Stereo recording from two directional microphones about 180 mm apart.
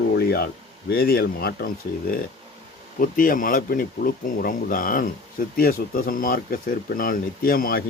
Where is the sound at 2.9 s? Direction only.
50° left (ahead or behind).